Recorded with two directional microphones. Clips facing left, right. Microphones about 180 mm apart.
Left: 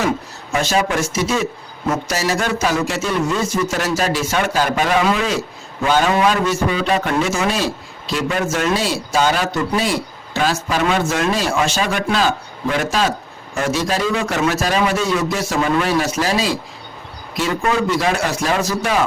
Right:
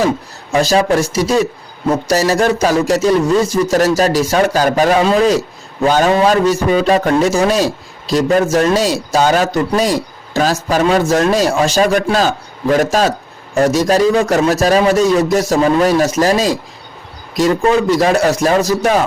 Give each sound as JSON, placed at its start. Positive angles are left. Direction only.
{"t": 0.6, "sound": "a man's voice", "side_deg": -35}